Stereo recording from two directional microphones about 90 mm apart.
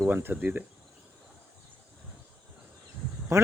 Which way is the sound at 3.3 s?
30° right (ahead or behind).